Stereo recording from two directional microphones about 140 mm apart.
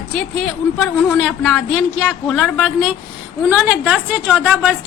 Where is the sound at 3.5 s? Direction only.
10° right (ahead or behind).